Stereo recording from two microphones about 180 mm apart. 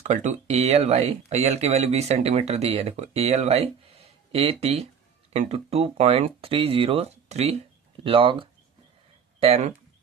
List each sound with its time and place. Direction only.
0.0 s speech: 40° right (ahead or behind)